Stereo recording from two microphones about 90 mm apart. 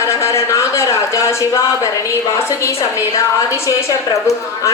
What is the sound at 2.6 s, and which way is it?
A woman's voice, 35° left (ahead or behind).